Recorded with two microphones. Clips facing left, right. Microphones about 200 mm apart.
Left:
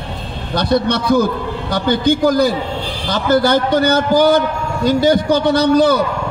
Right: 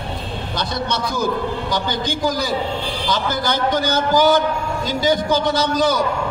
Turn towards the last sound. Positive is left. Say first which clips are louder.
# left 6 dB
turn(degrees=60)  # may be behind; listen again after turning